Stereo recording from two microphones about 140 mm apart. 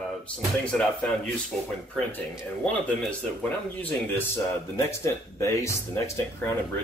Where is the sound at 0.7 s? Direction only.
5° left (ahead or behind).